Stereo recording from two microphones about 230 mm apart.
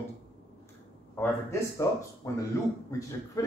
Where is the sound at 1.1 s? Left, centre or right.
Centre.